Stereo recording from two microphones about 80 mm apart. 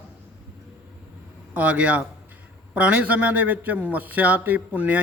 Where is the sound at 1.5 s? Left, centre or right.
Centre.